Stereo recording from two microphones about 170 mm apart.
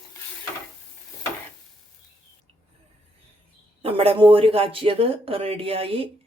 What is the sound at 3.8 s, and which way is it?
Speech, 35° right (ahead or behind).